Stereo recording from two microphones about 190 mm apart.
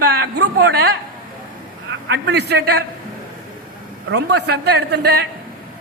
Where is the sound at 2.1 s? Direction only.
60° right (ahead or behind).